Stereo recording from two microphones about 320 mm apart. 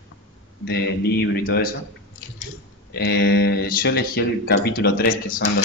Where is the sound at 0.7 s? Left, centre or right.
Left.